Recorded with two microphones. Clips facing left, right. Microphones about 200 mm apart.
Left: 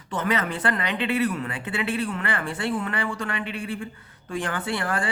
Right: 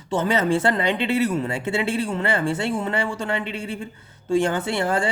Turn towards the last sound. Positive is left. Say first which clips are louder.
# right 5 dB
turn(degrees=-25)  # may be behind; listen again after turning